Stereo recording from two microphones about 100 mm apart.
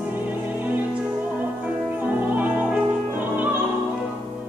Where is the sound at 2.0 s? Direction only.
15° right (ahead or behind).